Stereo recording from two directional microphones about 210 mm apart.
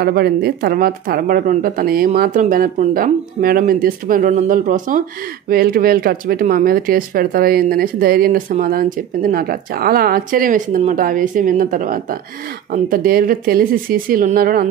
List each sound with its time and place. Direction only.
0.0 s speech: 50° right (ahead or behind)